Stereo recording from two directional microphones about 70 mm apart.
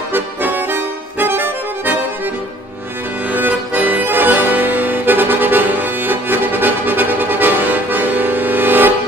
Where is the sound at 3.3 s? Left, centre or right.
Right.